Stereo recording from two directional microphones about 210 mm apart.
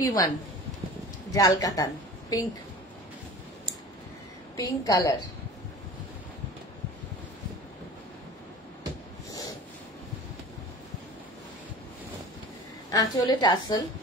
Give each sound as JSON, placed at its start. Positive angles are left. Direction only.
{"t": 0.0, "sound": "a woman's voice", "side_deg": 15}
{"t": 1.3, "sound": "a woman's voice", "side_deg": 15}
{"t": 4.6, "sound": "a woman's voice", "side_deg": 15}
{"t": 12.9, "sound": "a woman's voice", "side_deg": 20}